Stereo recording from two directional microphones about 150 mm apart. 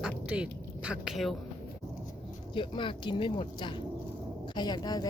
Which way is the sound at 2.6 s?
35° left (ahead or behind).